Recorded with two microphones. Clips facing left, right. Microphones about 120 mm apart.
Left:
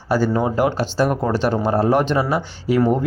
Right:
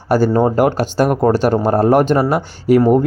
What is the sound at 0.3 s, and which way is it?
Speech, 45° right (ahead or behind).